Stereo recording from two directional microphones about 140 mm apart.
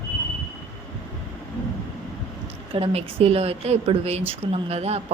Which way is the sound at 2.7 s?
45° right (ahead or behind).